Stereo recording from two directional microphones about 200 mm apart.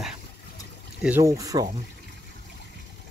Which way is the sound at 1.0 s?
10° right (ahead or behind).